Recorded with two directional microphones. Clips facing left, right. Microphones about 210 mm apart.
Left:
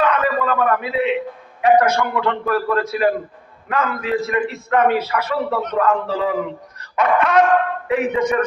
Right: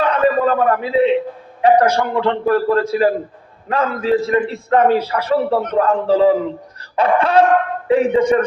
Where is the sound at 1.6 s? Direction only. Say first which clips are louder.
Right 2 dB; 30° right (ahead or behind).